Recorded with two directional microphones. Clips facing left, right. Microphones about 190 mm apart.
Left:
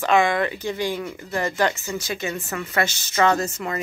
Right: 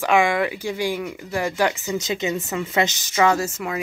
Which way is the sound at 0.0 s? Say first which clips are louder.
Even; 10° right (ahead or behind).